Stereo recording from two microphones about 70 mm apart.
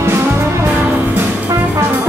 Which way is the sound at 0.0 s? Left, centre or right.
Right.